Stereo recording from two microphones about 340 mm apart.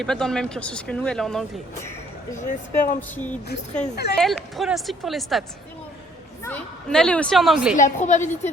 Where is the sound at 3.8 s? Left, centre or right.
Left.